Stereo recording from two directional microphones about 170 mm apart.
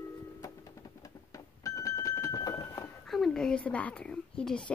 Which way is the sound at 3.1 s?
Centre (ahead or behind).